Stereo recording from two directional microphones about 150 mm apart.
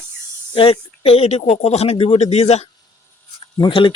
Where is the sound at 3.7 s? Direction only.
35° left (ahead or behind).